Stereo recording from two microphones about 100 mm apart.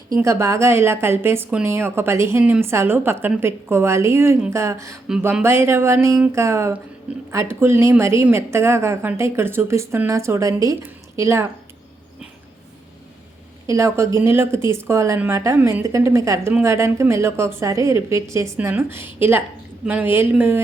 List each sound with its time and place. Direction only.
0.2 s a woman's voice: 30° right (ahead or behind)
13.7 s a woman's voice: 30° right (ahead or behind)